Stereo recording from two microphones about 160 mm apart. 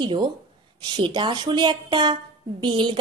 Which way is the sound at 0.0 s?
30° right (ahead or behind).